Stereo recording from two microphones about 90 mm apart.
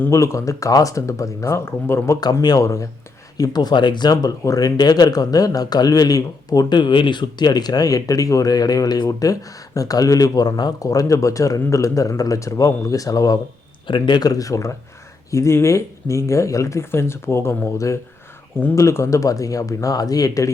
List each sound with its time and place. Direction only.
0.1 s speech: 35° left (ahead or behind)
2.2 s speech: 50° left (ahead or behind)
13.8 s speech: 65° left (ahead or behind); by 20.5 s 40° left (ahead or behind)